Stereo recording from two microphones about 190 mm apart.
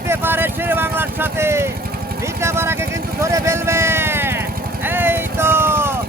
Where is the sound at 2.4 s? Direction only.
15° right (ahead or behind).